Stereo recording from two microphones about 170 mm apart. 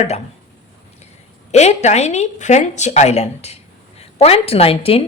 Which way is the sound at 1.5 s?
40° left (ahead or behind).